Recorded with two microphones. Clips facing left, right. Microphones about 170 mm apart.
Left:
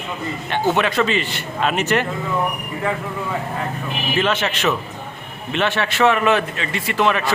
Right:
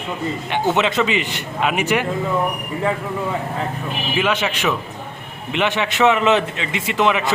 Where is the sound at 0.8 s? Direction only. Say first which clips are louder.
Even; 20° right (ahead or behind).